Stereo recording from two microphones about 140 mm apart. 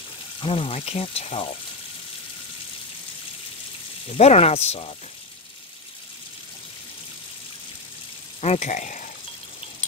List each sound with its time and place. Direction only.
0.4 s speech: 40° left (ahead or behind)
4.1 s speech: 50° left (ahead or behind)
8.4 s speech: 50° left (ahead or behind)